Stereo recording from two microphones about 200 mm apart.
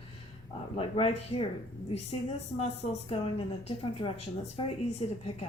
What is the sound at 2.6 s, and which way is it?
A woman's voice, 30° left (ahead or behind).